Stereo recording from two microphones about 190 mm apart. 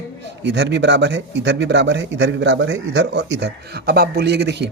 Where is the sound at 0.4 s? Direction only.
65° right (ahead or behind).